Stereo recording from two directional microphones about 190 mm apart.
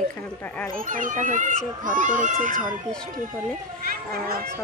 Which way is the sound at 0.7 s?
45° right (ahead or behind).